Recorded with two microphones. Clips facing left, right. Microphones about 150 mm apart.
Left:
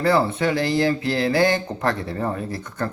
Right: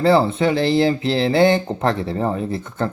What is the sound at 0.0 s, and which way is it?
Speech, 25° right (ahead or behind).